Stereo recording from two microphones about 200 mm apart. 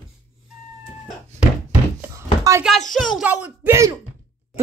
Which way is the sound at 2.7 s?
Centre (ahead or behind).